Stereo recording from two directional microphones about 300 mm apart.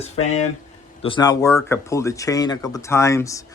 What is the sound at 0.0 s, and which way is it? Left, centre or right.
Speech, left.